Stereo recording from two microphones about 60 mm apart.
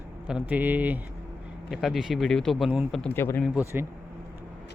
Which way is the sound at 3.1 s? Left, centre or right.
Left.